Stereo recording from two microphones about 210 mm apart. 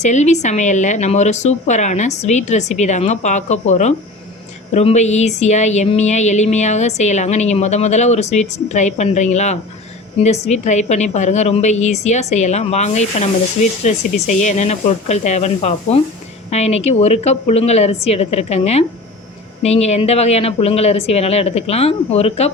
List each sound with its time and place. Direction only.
0.0 s speech: 35° left (ahead or behind)